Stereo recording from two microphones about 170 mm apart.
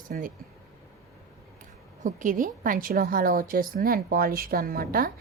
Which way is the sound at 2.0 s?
50° right (ahead or behind).